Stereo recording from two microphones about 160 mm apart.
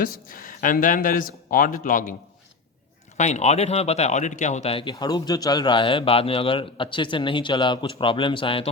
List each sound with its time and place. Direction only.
0.0 s speech: 60° left (ahead or behind)
3.2 s speech: 45° left (ahead or behind)